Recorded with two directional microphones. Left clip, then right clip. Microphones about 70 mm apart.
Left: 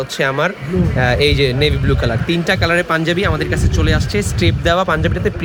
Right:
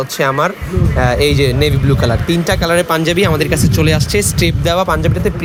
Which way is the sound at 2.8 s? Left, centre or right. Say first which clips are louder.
Right 3 dB; right.